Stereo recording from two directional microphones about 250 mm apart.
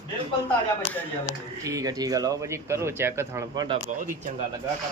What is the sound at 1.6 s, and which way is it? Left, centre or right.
A man's voice, centre.